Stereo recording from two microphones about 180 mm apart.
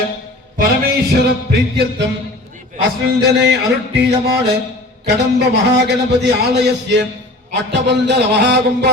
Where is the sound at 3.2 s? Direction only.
70° right (ahead or behind).